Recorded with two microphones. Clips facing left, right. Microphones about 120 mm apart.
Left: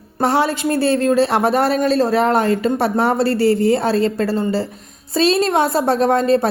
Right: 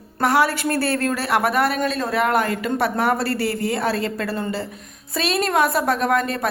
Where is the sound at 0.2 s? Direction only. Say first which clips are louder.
Left 2 dB; 25° left (ahead or behind).